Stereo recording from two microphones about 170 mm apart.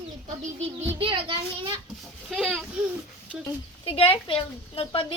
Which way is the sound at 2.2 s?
Centre (ahead or behind).